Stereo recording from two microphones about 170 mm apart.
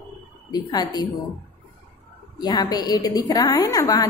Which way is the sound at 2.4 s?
25° left (ahead or behind).